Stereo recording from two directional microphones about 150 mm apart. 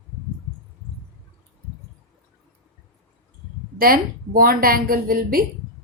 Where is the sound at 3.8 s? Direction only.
75° right (ahead or behind).